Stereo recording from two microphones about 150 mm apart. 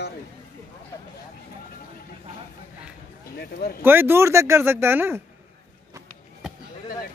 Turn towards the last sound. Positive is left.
turn(degrees=-15)  # may be behind; listen again after turning